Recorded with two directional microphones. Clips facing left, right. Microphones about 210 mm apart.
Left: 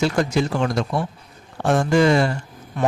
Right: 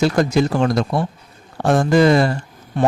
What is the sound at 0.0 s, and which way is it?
Speech, 40° right (ahead or behind).